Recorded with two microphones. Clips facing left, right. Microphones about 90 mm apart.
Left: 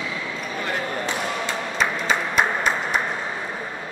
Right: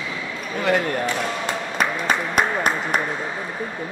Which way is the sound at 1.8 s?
50° right (ahead or behind).